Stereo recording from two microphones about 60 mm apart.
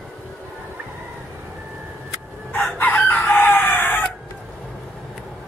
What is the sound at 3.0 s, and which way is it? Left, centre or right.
Chicken, left.